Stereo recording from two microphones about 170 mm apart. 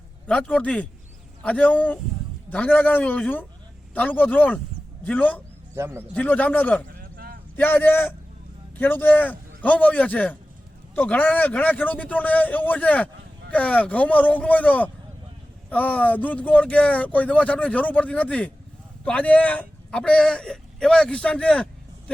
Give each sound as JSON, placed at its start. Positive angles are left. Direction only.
{"t": 0.3, "sound": "speech", "side_deg": 5}
{"t": 5.7, "sound": "speech", "side_deg": -15}
{"t": 6.1, "sound": "speech", "side_deg": 10}
{"t": 6.9, "sound": "a sound", "side_deg": -60}
{"t": 7.5, "sound": "a man's voice", "side_deg": 10}